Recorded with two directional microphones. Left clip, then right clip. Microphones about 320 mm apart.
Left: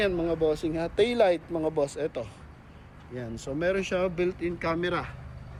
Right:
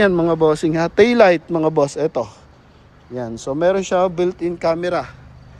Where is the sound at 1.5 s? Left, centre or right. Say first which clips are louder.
Right 11 dB; right.